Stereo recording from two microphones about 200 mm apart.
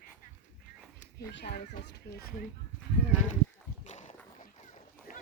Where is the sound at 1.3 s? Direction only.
60° left (ahead or behind).